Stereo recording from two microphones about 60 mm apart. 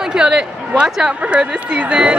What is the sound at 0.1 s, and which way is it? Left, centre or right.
Speech, centre.